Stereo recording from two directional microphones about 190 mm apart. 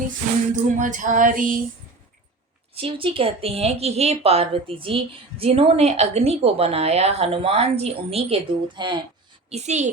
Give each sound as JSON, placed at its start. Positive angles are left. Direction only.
{"t": 0.5, "sound": "a sound", "side_deg": -40}
{"t": 2.7, "sound": "a woman's voice", "side_deg": -30}
{"t": 9.5, "sound": "a woman's voice", "side_deg": -35}